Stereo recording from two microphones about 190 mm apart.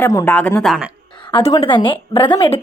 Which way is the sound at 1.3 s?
25° left (ahead or behind).